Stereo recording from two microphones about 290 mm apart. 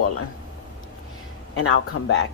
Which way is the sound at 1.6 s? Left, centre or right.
Left.